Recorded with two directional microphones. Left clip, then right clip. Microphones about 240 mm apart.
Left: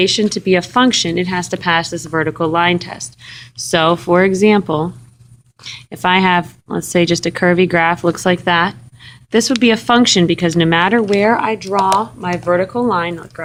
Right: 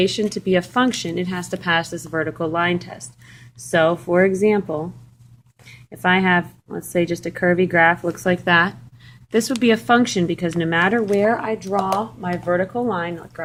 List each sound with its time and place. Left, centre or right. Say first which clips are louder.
0.0 s speech: left 6 dB; centre